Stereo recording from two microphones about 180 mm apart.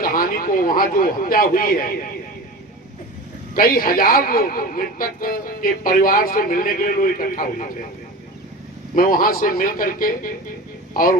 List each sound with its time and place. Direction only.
0.0 s a man's voice: 50° left (ahead or behind)
3.5 s a man's voice: 55° left (ahead or behind)
9.0 s a man's voice: 55° left (ahead or behind)